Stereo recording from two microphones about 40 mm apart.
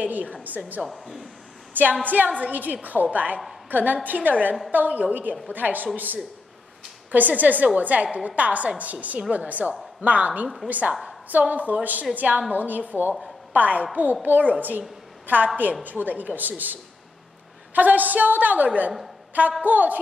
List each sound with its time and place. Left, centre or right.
0.0 s a woman's voice: right
0.8 s speech: centre
1.7 s a woman's voice: right
17.7 s a woman's voice: right